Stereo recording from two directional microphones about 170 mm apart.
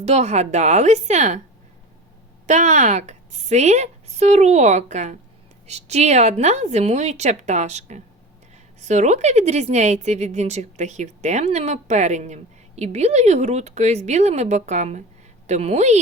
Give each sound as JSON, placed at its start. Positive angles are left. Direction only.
{"t": 0.0, "sound": "a woman's voice", "side_deg": -40}
{"t": 2.5, "sound": "a woman's voice", "side_deg": -45}